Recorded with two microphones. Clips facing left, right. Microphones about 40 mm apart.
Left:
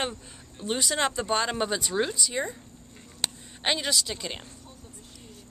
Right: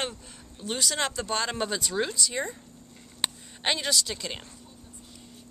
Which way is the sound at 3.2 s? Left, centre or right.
Centre.